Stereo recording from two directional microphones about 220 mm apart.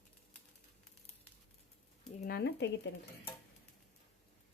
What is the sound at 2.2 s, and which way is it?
Speech, 50° left (ahead or behind).